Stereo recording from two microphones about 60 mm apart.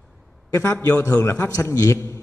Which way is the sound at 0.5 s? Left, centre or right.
Left.